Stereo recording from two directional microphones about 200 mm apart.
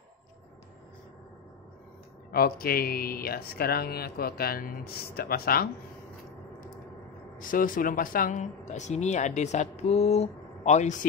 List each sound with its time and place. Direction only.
2.3 s speech: 50° left (ahead or behind)
7.3 s speech: 45° left (ahead or behind)